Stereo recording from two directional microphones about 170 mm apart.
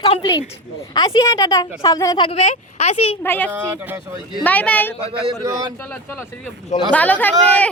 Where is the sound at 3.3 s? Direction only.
10° left (ahead or behind).